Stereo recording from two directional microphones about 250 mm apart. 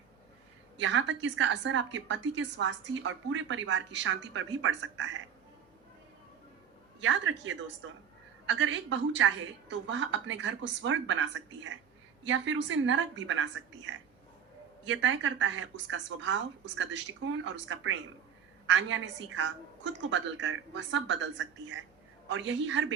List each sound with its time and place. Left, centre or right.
0.8 s a woman's voice: right
7.0 s a woman's voice: right
14.8 s a woman's voice: right